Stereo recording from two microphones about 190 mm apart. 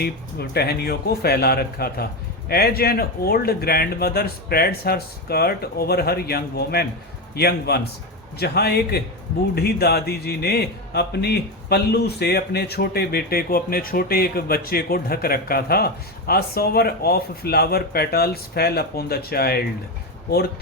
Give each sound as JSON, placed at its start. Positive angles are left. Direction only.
{"t": 0.0, "sound": "speech", "side_deg": 55}